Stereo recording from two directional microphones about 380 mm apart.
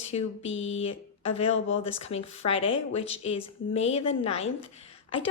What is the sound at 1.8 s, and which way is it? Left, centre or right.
Speech, centre.